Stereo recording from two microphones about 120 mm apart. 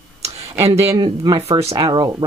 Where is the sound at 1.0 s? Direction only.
40° right (ahead or behind).